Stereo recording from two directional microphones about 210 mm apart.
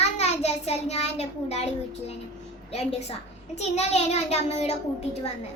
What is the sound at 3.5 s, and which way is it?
A child's voice, 30° left (ahead or behind).